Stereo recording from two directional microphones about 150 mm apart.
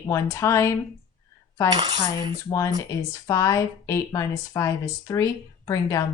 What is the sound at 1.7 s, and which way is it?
Cutlery, 30° right (ahead or behind).